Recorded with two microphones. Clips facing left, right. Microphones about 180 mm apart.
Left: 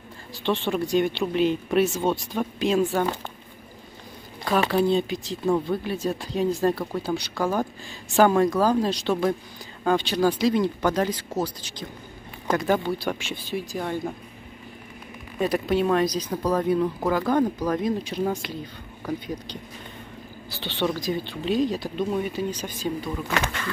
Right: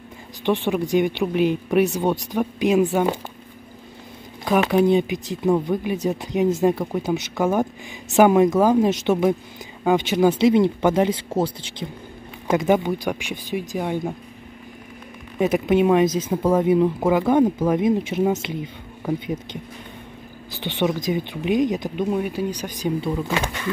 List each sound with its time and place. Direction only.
0.4 s speech: 15° right (ahead or behind)
4.6 s speech: 15° right (ahead or behind)
15.3 s speech: 20° right (ahead or behind)